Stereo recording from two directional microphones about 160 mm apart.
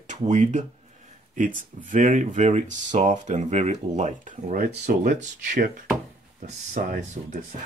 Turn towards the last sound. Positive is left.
turn(degrees=-55)  # may be behind; listen again after turning